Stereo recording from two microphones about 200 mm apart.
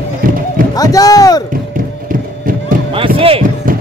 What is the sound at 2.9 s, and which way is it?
Music, 25° right (ahead or behind).